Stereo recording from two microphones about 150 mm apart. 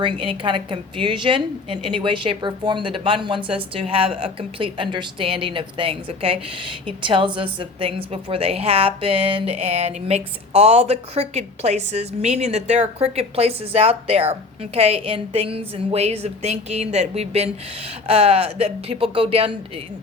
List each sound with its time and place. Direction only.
0.0 s a woman's voice: 35° right (ahead or behind)